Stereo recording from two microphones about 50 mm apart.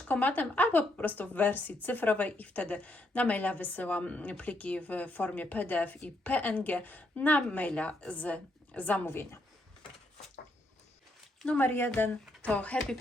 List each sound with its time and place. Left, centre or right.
0.1 s a woman's voice: left
9.0 s a woman's voice: left
11.6 s speech: left
12.4 s speech: left